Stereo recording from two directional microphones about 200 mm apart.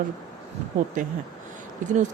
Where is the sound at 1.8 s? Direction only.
40° right (ahead or behind).